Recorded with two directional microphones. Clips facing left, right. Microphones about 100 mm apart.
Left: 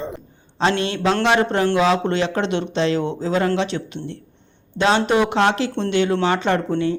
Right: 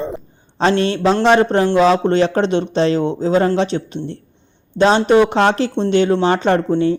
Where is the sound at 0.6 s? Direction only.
35° right (ahead or behind).